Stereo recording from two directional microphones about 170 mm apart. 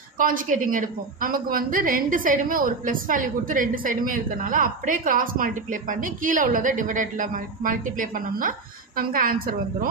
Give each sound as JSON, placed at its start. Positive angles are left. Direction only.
{"t": 0.2, "sound": "a woman's voice", "side_deg": -55}